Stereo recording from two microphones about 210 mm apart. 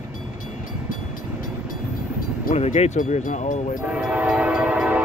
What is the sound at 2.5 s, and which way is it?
Speech, 35° left (ahead or behind).